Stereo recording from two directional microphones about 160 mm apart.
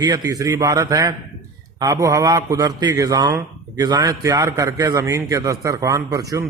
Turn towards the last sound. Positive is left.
turn(degrees=-20)  # may be behind; listen again after turning